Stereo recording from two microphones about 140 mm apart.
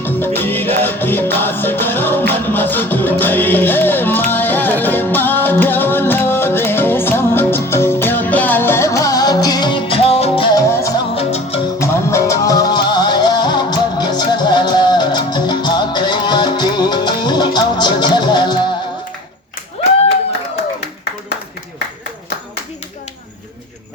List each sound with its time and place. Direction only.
0.0 s music: 15° left (ahead or behind); by 10.6 s 40° left (ahead or behind)
10.6 s music: 20° left (ahead or behind)
11.1 s music: 45° left (ahead or behind)
11.8 s music: 20° left (ahead or behind)